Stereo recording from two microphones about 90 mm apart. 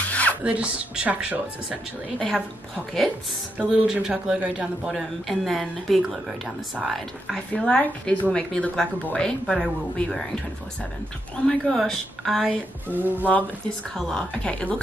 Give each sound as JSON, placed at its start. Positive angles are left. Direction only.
{"t": 0.0, "sound": "filing", "side_deg": 15}
{"t": 0.4, "sound": "a man's voice", "side_deg": -15}
{"t": 2.3, "sound": "speech", "side_deg": 0}
{"t": 3.5, "sound": "a man's voice", "side_deg": -10}
{"t": 7.5, "sound": "speech", "side_deg": 10}
{"t": 11.4, "sound": "speech", "side_deg": 5}
{"t": 12.8, "sound": "speech", "side_deg": -20}
{"t": 13.9, "sound": "speech", "side_deg": 5}